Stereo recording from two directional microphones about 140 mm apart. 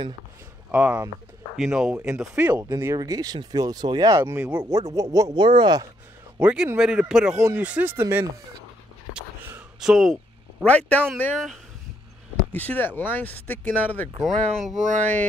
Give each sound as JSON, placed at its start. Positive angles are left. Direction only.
{"t": 0.7, "sound": "speech", "side_deg": -10}
{"t": 2.7, "sound": "speech", "side_deg": -20}
{"t": 6.3, "sound": "a man's voice", "side_deg": -10}
{"t": 9.1, "sound": "a sound", "side_deg": -5}
{"t": 10.6, "sound": "speech", "side_deg": 10}
{"t": 12.5, "sound": "speech", "side_deg": 10}
{"t": 14.4, "sound": "speech", "side_deg": 0}
{"t": 14.9, "sound": "speech", "side_deg": -65}